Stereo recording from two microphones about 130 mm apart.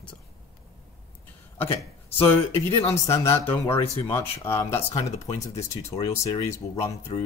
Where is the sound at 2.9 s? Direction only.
20° left (ahead or behind).